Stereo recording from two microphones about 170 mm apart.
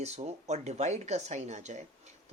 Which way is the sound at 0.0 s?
40° right (ahead or behind).